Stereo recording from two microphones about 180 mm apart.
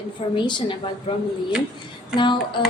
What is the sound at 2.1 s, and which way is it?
Speech, 25° left (ahead or behind).